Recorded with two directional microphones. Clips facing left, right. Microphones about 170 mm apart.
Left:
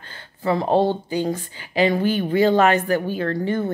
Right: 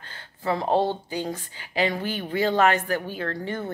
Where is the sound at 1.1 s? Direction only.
25° left (ahead or behind).